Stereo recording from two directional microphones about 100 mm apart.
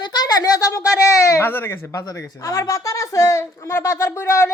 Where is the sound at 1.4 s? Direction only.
20° left (ahead or behind).